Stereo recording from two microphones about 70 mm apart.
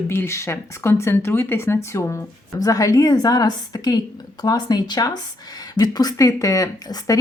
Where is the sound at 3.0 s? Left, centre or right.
Left.